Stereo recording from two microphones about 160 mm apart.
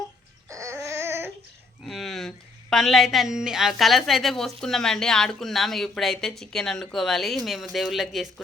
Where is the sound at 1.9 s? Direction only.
Centre (ahead or behind).